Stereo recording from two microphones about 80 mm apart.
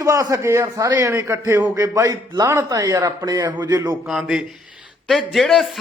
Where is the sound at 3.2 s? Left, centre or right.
Right.